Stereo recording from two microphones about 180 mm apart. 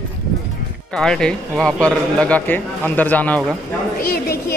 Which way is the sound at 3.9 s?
55° left (ahead or behind).